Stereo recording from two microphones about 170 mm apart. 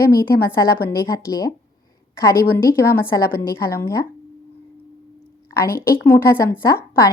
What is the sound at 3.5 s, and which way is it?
Speech, 15° left (ahead or behind).